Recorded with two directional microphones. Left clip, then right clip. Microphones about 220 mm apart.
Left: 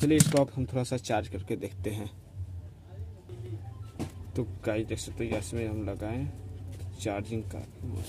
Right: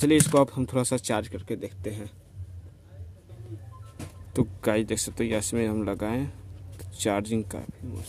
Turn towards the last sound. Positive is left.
turn(degrees=-40)  # may be behind; listen again after turning